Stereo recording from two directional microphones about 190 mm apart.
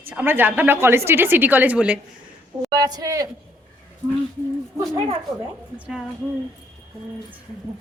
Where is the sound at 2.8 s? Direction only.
20° right (ahead or behind).